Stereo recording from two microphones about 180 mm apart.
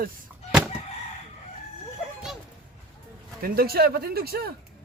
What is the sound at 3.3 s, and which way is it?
Speech, 55° right (ahead or behind).